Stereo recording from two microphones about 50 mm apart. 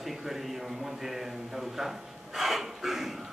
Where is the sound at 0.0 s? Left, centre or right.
Centre.